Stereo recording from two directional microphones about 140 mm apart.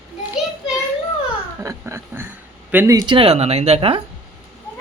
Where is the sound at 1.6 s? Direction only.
15° right (ahead or behind).